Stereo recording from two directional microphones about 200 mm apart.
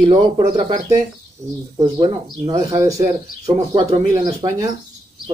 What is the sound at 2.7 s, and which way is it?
Speech, 15° right (ahead or behind).